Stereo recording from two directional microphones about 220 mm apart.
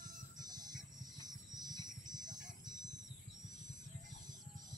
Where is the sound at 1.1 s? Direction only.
20° right (ahead or behind).